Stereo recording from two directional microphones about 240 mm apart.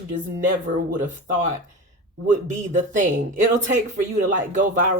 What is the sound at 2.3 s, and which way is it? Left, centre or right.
Speech, right.